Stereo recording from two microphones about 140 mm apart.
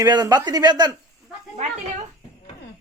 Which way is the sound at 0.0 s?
30° right (ahead or behind).